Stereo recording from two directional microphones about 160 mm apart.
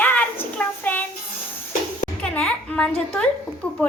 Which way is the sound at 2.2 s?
5° left (ahead or behind).